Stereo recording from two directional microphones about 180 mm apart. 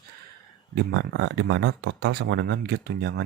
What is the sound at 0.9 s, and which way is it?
Speech, 85° right.